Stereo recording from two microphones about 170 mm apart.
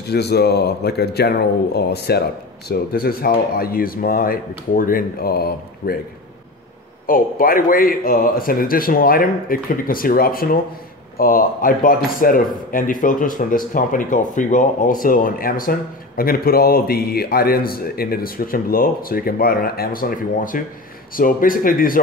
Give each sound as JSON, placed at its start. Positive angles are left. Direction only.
{"t": 0.1, "sound": "speech", "side_deg": 70}
{"t": 7.1, "sound": "speech", "side_deg": 55}